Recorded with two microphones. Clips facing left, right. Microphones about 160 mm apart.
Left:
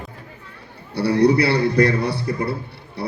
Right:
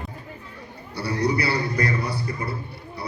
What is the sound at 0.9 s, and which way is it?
A man's voice, 65° left (ahead or behind).